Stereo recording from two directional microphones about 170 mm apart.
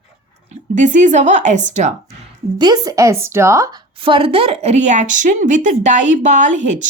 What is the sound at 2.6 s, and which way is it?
A woman's voice, 20° right (ahead or behind).